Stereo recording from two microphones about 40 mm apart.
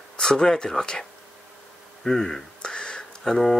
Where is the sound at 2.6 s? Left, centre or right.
Left.